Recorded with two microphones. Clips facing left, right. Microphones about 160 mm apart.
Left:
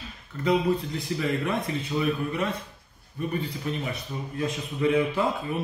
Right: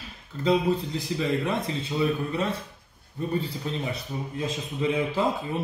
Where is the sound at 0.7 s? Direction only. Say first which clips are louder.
Even; 25° right (ahead or behind).